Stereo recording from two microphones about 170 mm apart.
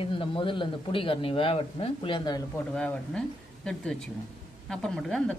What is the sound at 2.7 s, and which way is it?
A man's voice, 5° left (ahead or behind).